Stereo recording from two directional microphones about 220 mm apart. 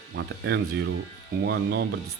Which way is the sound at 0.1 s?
50° right (ahead or behind).